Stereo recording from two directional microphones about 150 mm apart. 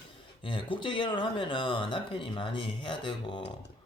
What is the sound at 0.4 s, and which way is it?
Speech, 35° left (ahead or behind).